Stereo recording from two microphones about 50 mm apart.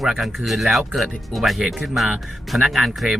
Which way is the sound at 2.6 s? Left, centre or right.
Centre.